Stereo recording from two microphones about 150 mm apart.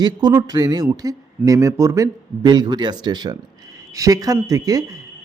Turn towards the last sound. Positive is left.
turn(degrees=-25)  # may be behind; listen again after turning